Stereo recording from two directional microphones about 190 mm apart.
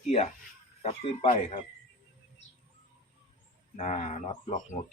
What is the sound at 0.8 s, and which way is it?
Speech, 30° left (ahead or behind).